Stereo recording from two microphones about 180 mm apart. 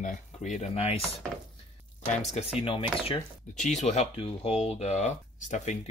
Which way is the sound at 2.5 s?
30° left (ahead or behind).